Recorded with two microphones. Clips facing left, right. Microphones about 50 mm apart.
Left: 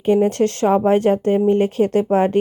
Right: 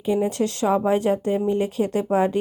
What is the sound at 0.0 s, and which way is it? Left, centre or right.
Speech, left.